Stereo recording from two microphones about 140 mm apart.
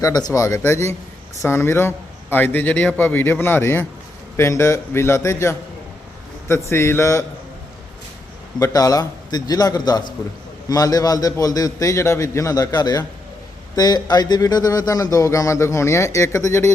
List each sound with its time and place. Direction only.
0.0 s a man's voice: 25° left (ahead or behind)
8.5 s speech: 25° left (ahead or behind)